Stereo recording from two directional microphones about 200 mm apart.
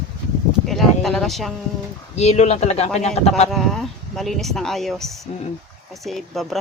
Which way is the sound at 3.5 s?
Centre (ahead or behind).